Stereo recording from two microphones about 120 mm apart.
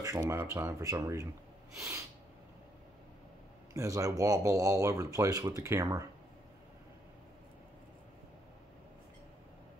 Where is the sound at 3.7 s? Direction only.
25° right (ahead or behind).